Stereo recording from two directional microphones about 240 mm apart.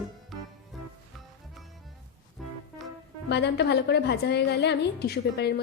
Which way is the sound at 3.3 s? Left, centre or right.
Left.